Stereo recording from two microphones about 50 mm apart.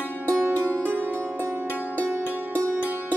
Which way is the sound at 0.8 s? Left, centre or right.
Right.